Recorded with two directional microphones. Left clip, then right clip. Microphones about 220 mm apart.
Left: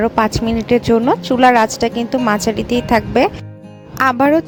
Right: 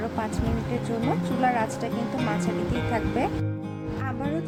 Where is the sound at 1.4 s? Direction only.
45° left (ahead or behind).